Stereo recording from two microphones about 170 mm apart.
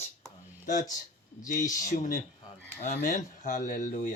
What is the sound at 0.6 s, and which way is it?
Speech, 45° left (ahead or behind).